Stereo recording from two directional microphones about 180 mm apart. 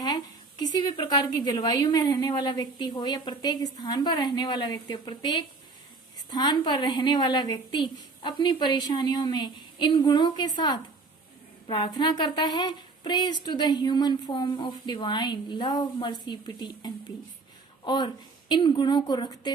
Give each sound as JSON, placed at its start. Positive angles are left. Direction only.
{"t": 0.6, "sound": "a woman's voice", "side_deg": 20}